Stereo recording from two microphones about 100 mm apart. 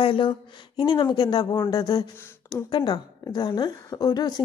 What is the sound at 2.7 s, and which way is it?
A woman's voice, 45° left (ahead or behind).